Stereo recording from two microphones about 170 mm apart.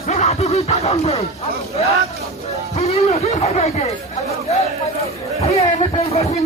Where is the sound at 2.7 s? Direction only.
40° left (ahead or behind).